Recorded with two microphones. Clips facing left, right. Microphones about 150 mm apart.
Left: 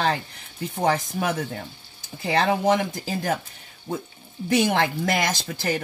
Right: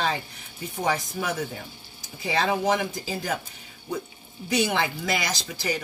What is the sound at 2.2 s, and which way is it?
Speech, 60° left (ahead or behind).